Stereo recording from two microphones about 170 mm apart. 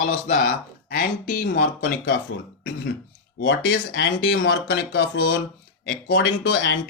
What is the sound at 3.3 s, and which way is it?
Speech, 90° left.